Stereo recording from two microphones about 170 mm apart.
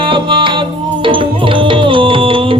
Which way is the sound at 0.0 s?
30° right (ahead or behind).